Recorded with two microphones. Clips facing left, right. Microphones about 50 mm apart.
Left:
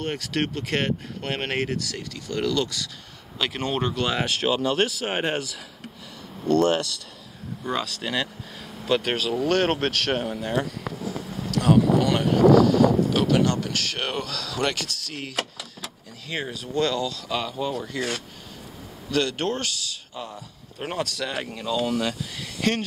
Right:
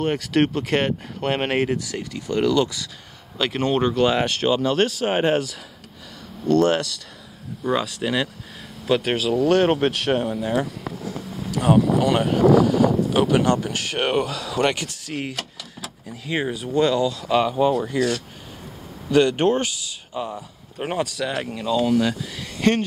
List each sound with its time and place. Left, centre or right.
0.0 s speech: centre
7.6 s speech: centre
11.5 s speech: centre
19.0 s speech: centre